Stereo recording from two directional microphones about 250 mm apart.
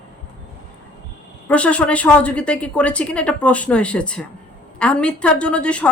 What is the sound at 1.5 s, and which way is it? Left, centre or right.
A woman's voice, centre.